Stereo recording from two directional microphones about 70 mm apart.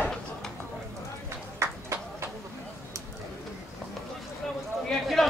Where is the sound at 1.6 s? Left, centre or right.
Right.